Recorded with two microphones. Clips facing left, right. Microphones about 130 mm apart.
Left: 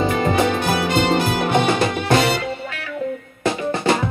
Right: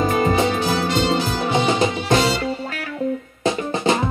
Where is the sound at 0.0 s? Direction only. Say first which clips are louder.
Right 1 dB; 40° right (ahead or behind).